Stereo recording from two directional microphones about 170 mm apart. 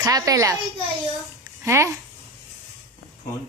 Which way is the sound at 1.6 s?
15° right (ahead or behind).